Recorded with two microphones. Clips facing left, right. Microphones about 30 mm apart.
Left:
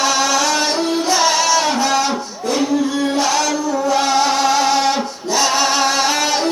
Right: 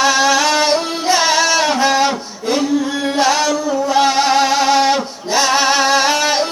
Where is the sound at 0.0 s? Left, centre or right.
Right.